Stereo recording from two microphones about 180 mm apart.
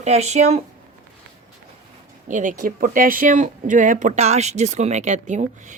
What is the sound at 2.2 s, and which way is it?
Speech, 45° right (ahead or behind).